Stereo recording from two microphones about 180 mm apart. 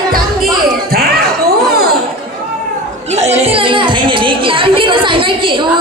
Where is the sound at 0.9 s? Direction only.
55° right (ahead or behind).